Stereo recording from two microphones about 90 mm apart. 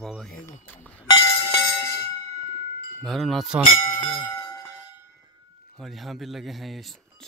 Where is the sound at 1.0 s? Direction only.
65° left (ahead or behind).